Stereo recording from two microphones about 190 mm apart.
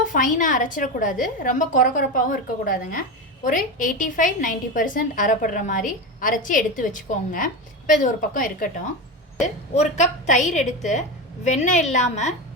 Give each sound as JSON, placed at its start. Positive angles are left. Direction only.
{"t": 0.1, "sound": "a woman's voice", "side_deg": 45}
{"t": 9.9, "sound": "a woman's voice", "side_deg": 40}